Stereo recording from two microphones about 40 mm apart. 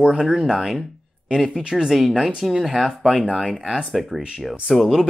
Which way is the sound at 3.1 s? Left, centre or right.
Centre.